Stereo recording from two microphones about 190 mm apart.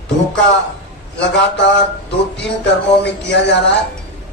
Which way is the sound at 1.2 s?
70° left (ahead or behind).